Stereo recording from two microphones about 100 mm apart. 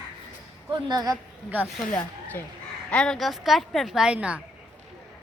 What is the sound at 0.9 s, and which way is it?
Speech, 45° right (ahead or behind).